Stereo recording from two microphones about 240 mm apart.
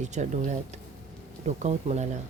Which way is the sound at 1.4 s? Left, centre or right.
Right.